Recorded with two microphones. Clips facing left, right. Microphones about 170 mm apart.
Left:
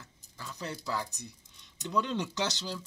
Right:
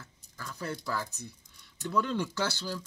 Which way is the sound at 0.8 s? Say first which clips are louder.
Even; 15° left (ahead or behind).